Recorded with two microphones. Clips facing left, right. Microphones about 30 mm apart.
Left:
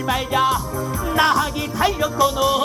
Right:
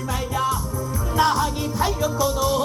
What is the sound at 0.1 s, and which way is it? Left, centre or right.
Music, left.